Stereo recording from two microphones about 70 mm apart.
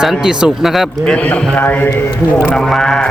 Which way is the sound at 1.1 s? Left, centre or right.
Centre.